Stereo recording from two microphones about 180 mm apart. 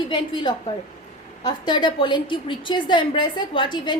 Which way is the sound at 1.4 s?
25° left (ahead or behind).